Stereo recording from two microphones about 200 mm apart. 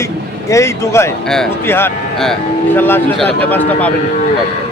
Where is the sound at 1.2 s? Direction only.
5° left (ahead or behind).